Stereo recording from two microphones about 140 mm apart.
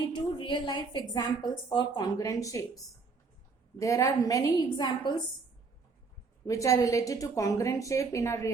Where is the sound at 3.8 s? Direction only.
25° left (ahead or behind).